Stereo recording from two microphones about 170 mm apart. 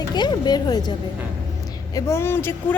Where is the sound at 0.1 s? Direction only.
25° left (ahead or behind).